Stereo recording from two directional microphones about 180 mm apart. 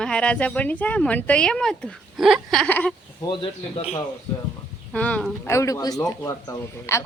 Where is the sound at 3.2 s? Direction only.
25° left (ahead or behind).